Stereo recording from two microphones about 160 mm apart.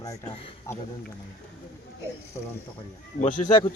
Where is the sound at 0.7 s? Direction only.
15° left (ahead or behind).